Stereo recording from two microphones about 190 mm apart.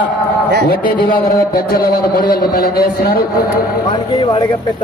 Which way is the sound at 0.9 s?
45° left (ahead or behind).